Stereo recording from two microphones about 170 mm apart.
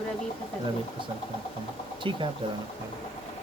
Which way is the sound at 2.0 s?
30° right (ahead or behind).